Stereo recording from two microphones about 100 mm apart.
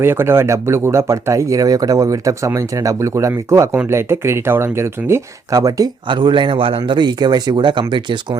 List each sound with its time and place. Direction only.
0.0 s speech: 25° right (ahead or behind)
6.1 s a man's voice: 50° right (ahead or behind)